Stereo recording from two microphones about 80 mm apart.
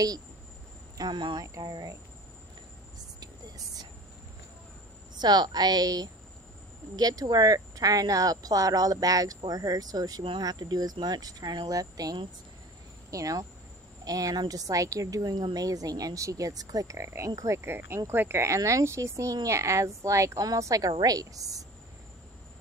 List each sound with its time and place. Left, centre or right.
0.9 s speech: right
1.4 s speech: right
3.2 s a sound: right
5.2 s speech: right
10.2 s speech: right